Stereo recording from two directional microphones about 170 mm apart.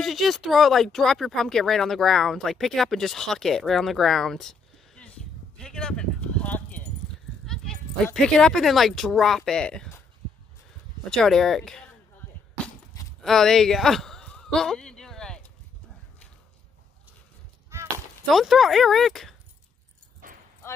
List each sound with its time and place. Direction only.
0.0 s speech: centre (ahead or behind)
5.6 s keys jangling: 5° left (ahead or behind)
7.4 s speech: 5° left (ahead or behind)
11.1 s speech: centre (ahead or behind)
13.2 s a sound: 5° left (ahead or behind)
17.6 s chop: 15° right (ahead or behind)
18.3 s speech: centre (ahead or behind)
20.2 s a sound: 50° right (ahead or behind)
20.6 s clip-clop: 15° left (ahead or behind)